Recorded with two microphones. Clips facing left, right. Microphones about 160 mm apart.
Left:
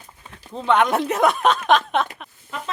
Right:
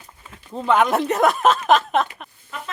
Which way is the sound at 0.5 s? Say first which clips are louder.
Even; centre (ahead or behind).